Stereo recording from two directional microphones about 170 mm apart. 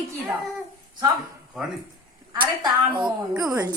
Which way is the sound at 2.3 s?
25° right (ahead or behind).